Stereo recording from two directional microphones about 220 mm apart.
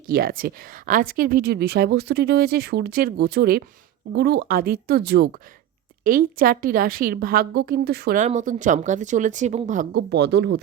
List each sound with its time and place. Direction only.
0.1 s a woman's voice: 40° right (ahead or behind)
9.9 s a woman's voice: 50° right (ahead or behind)